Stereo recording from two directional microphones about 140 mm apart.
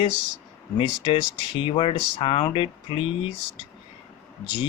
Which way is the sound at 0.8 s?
35° left (ahead or behind).